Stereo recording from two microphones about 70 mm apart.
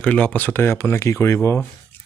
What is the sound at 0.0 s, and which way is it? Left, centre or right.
Speech, centre.